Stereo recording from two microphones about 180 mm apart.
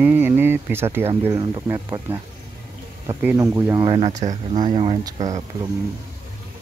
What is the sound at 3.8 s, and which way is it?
Speech, 30° right (ahead or behind).